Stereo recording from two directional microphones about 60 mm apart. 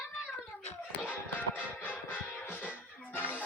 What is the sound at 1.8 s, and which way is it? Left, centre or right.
Music, left.